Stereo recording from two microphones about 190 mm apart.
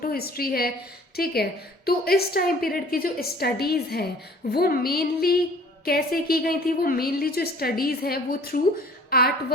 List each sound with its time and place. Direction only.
0.0 s a woman's voice: 55° left (ahead or behind)